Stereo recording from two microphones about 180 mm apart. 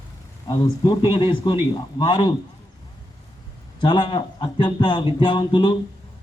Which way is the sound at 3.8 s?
25° left (ahead or behind).